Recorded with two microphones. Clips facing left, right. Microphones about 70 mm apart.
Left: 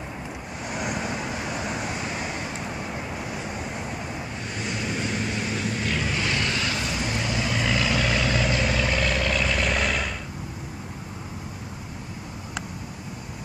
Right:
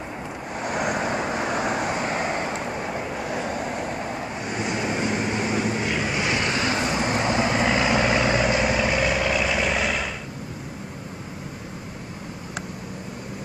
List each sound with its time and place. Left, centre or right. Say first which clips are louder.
0.7 s vehicle: right 5 dB; right
4.1 s vehicle: right 4 dB; right; by 10.0 s centre